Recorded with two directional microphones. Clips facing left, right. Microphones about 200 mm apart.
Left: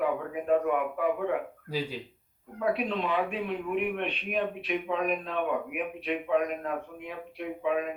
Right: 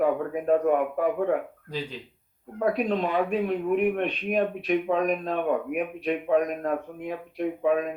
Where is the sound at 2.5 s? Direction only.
45° right (ahead or behind).